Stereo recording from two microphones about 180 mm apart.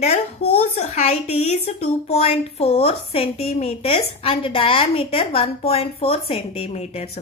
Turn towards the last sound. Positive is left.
turn(degrees=35)  # may be behind; listen again after turning